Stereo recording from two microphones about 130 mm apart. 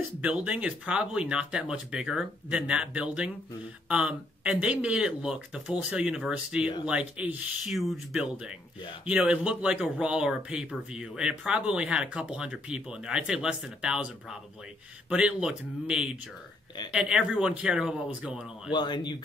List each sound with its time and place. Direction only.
0.2 s speech: 10° right (ahead or behind)
15.0 s speech: 10° right (ahead or behind)
18.7 s speech: 35° left (ahead or behind)